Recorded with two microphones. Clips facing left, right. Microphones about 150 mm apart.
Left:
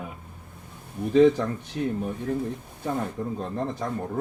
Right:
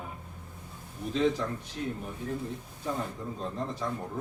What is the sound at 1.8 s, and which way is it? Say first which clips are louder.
Speech: left 7 dB; 75° left (ahead or behind).